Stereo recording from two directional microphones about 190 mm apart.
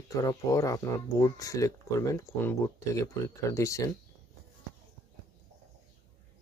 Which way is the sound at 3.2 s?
15° left (ahead or behind).